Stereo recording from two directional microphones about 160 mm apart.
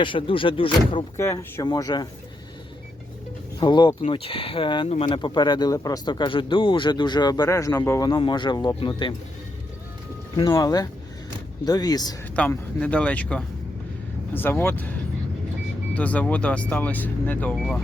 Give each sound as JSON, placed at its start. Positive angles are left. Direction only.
{"t": 0.0, "sound": "speech", "side_deg": 30}
{"t": 1.1, "sound": "speech", "side_deg": 15}
{"t": 1.6, "sound": "speech", "side_deg": 25}
{"t": 3.6, "sound": "speech", "side_deg": 30}
{"t": 10.5, "sound": "speech", "side_deg": 20}
{"t": 12.4, "sound": "speech", "side_deg": 10}
{"t": 16.0, "sound": "speech", "side_deg": 10}